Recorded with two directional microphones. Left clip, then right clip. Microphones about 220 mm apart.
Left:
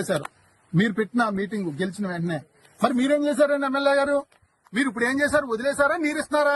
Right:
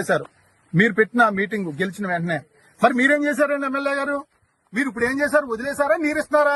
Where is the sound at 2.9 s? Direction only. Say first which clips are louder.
Right 4 dB; 25° right (ahead or behind).